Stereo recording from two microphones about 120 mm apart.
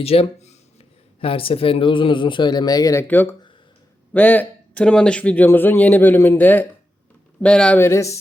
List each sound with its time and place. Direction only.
0.0 s a man's voice: 55° left (ahead or behind); by 7.8 s 10° left (ahead or behind)
7.8 s speech: 20° left (ahead or behind)